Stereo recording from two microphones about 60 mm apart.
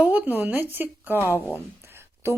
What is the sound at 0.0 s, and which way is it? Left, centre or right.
A woman's voice, right.